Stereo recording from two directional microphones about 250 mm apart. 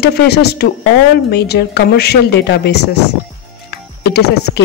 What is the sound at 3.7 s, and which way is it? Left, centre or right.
Music, left.